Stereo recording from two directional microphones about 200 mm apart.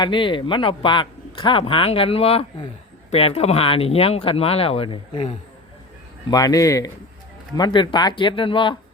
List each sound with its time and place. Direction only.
0.0 s speech: 25° left (ahead or behind)